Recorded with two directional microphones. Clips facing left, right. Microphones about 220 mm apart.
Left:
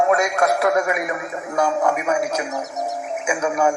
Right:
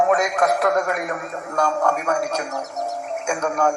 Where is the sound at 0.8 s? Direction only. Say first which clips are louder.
Left 1 dB; 15° left (ahead or behind).